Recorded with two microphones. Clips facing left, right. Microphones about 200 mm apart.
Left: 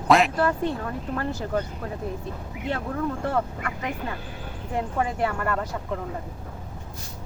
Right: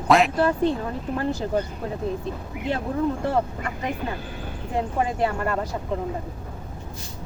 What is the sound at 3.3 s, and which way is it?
Speech, 25° right (ahead or behind).